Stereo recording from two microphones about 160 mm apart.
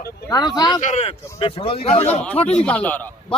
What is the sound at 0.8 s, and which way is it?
A man's voice, 40° left (ahead or behind).